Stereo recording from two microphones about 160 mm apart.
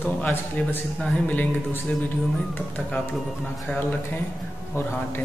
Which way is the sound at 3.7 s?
10° left (ahead or behind).